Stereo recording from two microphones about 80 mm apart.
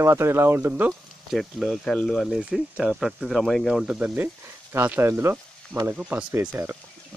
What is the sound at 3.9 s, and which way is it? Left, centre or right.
Speech, right.